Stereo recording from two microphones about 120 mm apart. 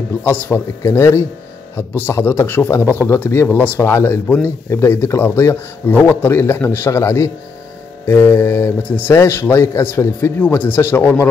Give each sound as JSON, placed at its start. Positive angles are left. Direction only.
{"t": 0.2, "sound": "speech", "side_deg": 20}